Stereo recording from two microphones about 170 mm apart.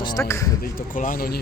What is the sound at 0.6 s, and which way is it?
Speech, 55° left (ahead or behind).